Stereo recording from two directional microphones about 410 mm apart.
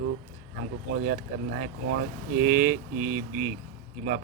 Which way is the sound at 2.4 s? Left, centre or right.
Centre.